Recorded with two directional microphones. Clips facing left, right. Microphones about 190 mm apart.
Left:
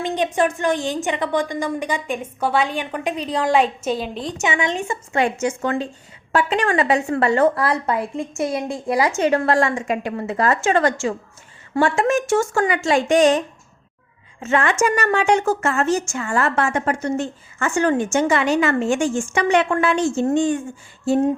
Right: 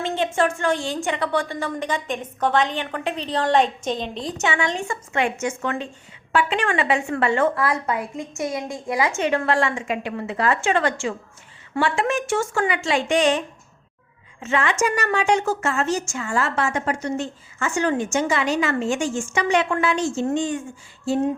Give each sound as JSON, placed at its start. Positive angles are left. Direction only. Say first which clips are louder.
{"t": 0.0, "sound": "a woman's voice", "louder": "left 2 dB", "side_deg": 15}
{"t": 4.4, "sound": "speech", "louder": "left 2 dB", "side_deg": 20}
{"t": 5.1, "sound": "a woman's voice", "louder": "left 3 dB", "side_deg": 35}
{"t": 14.4, "sound": "a woman's voice", "louder": "left 3 dB", "side_deg": 50}